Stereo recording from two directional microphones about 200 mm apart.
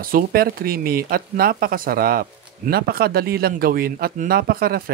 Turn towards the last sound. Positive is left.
turn(degrees=-45)  # may be behind; listen again after turning